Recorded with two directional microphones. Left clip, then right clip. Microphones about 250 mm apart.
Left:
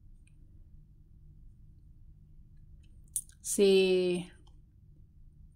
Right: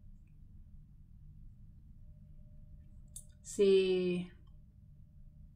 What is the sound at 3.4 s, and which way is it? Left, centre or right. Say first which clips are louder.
Speech: left 3 dB; left.